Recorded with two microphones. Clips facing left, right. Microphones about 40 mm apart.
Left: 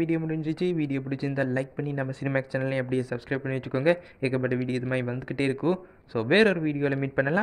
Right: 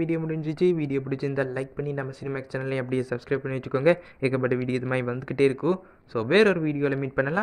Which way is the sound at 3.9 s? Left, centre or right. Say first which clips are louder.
Right 2 dB; centre.